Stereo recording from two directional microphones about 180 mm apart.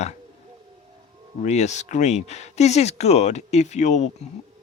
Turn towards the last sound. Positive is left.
turn(degrees=40)  # may be behind; listen again after turning